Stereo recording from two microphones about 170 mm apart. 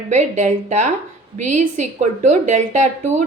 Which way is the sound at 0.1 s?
45° right (ahead or behind).